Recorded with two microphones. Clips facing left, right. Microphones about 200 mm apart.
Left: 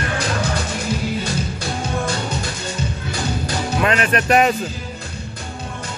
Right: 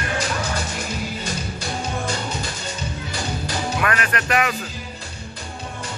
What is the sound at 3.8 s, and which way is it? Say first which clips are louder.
Speech: left 8 dB; 25° left (ahead or behind).